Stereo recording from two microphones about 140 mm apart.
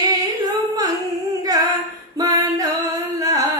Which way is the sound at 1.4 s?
25° right (ahead or behind).